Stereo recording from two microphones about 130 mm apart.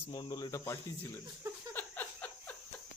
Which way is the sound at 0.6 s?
20° left (ahead or behind).